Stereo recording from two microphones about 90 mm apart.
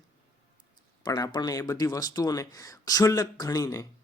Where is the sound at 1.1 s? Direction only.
40° left (ahead or behind).